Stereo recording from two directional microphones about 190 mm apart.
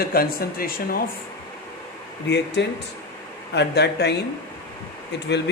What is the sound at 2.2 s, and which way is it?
A man's voice, 65° left (ahead or behind).